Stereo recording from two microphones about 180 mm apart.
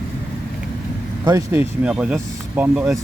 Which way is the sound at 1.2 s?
20° right (ahead or behind).